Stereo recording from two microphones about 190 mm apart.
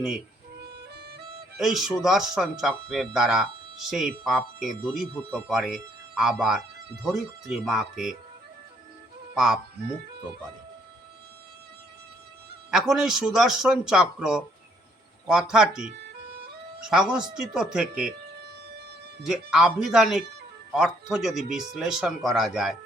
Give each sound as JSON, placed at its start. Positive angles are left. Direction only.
{"t": 0.6, "sound": "music", "side_deg": -60}
{"t": 1.5, "sound": "speech", "side_deg": 0}
{"t": 9.3, "sound": "speech", "side_deg": -5}
{"t": 12.9, "sound": "speech", "side_deg": -5}
{"t": 16.9, "sound": "speech", "side_deg": -5}
{"t": 19.3, "sound": "speech", "side_deg": 0}